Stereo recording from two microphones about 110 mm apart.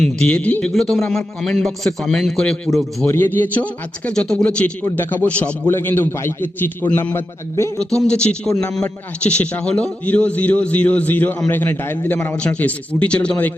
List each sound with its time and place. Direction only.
0.0 s a man's voice: 5° left (ahead or behind)
3.1 s a man's voice: 20° left (ahead or behind)
7.8 s a man's voice: 5° left (ahead or behind)